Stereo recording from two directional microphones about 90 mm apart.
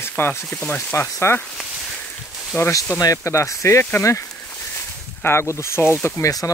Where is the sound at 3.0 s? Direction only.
40° left (ahead or behind).